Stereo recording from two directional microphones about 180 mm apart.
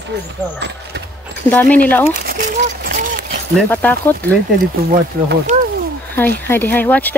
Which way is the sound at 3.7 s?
10° left (ahead or behind).